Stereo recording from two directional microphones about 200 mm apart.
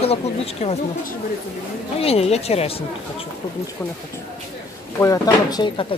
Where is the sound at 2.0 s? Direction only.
30° left (ahead or behind).